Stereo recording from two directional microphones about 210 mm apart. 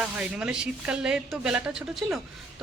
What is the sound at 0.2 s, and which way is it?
Speech, 5° right (ahead or behind).